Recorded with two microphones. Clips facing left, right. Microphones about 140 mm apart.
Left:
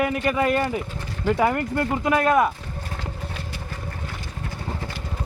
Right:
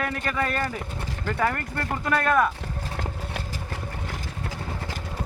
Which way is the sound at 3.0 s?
55° right (ahead or behind).